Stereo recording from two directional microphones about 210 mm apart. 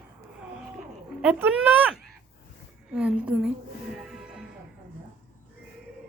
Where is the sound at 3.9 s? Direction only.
5° right (ahead or behind).